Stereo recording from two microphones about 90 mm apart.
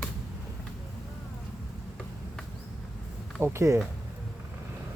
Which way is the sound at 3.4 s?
30° right (ahead or behind).